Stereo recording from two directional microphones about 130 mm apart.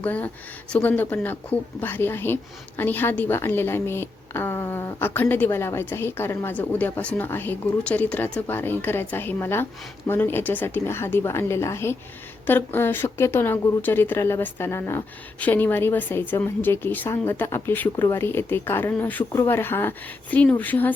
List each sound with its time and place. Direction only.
0.0 s a woman's voice: 10° left (ahead or behind)